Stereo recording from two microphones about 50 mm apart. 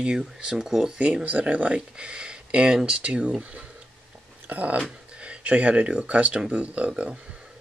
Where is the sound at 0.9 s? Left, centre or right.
Right.